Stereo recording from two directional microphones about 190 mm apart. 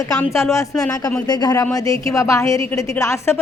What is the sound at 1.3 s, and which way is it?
A woman's voice, 20° left (ahead or behind).